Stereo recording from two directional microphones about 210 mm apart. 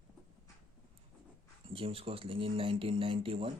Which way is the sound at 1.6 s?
25° right (ahead or behind).